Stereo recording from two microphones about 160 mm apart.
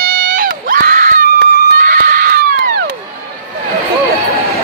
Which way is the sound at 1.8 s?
65° right (ahead or behind).